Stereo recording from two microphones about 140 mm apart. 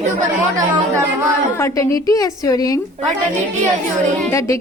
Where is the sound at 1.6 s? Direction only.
25° left (ahead or behind).